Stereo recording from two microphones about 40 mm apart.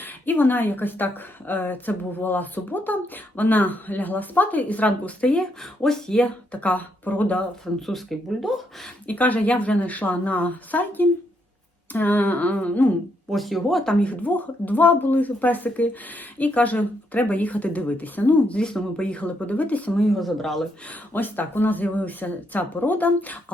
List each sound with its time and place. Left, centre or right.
0.0 s a woman's voice: left
5.2 s speech: left
5.8 s speech: centre
6.2 s a woman's voice: left
7.6 s speech: centre
9.0 s a woman's voice: left
13.3 s speech: centre
14.0 s a woman's voice: left
18.6 s speech: centre
19.1 s a woman's voice: left
20.0 s speech: centre
21.1 s a woman's voice: left